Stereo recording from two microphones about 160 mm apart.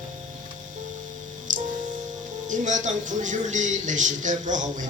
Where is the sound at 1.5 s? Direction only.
50° right (ahead or behind).